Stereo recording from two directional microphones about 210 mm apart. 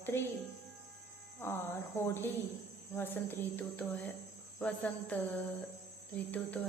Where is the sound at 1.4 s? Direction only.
10° left (ahead or behind).